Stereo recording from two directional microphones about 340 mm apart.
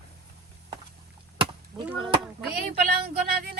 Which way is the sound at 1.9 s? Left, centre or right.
Centre.